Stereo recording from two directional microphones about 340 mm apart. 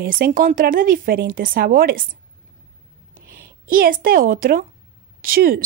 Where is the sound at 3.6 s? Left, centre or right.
Right.